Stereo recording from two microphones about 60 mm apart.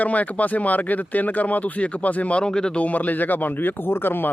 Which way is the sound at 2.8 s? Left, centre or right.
Left.